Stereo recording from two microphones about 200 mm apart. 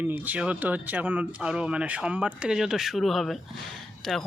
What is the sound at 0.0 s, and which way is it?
Speech, 10° right (ahead or behind).